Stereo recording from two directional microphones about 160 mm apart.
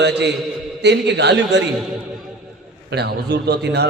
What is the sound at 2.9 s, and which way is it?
Speech, 90° right.